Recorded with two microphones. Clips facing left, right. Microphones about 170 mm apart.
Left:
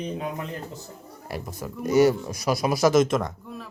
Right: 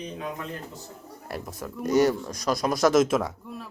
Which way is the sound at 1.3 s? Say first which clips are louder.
Left 1 dB; centre (ahead or behind).